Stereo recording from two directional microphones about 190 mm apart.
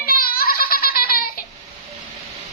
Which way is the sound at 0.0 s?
50° left (ahead or behind).